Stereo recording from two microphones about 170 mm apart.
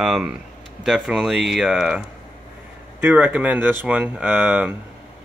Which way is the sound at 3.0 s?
10° right (ahead or behind).